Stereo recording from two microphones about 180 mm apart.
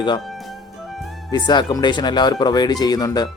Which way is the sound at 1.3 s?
25° left (ahead or behind).